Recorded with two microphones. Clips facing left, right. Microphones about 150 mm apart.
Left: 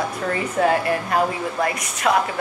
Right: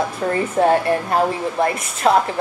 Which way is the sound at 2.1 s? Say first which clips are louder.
Right 4 dB; 30° right (ahead or behind).